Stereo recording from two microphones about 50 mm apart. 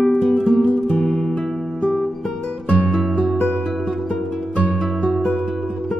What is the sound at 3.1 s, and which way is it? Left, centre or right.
Music, centre.